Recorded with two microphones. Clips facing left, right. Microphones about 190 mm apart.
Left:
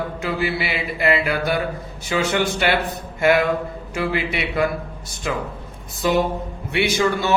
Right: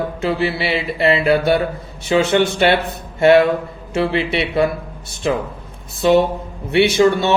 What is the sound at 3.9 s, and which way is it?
A man's voice, 25° right (ahead or behind).